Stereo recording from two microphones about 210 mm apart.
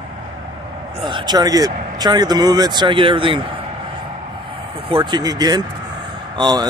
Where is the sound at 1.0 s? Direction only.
20° right (ahead or behind).